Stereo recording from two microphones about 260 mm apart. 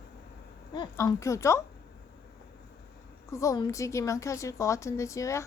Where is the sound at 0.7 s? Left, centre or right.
Centre.